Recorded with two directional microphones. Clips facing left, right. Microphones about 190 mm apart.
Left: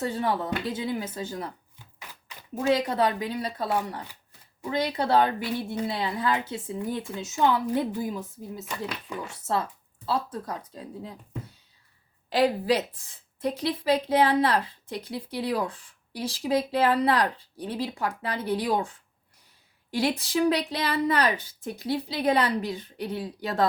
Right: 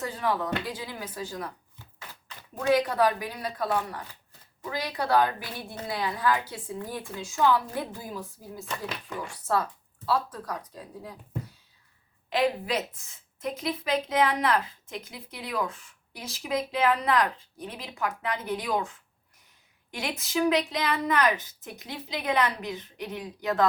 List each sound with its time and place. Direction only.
0.0 s a woman's voice: 25° left (ahead or behind)
2.0 s a sound: 15° left (ahead or behind)
2.7 s a woman's voice: 25° left (ahead or behind)
8.6 s speech: 10° left (ahead or behind)
9.2 s a woman's voice: 25° left (ahead or behind)
12.3 s a woman's voice: 35° left (ahead or behind)